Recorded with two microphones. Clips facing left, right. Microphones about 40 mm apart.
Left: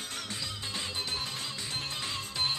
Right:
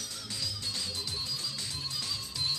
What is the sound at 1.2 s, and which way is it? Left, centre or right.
Music, left.